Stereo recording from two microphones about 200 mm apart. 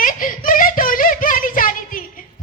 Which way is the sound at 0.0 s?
45° left (ahead or behind).